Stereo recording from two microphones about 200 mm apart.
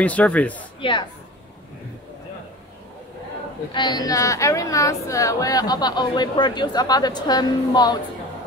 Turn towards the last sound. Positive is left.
turn(degrees=20)  # may be behind; listen again after turning